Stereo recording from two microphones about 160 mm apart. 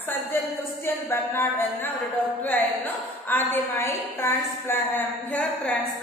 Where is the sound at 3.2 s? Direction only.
15° left (ahead or behind).